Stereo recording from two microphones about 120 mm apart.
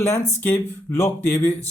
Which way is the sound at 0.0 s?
20° left (ahead or behind).